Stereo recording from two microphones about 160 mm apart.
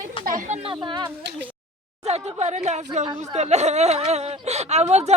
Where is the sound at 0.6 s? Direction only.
25° right (ahead or behind).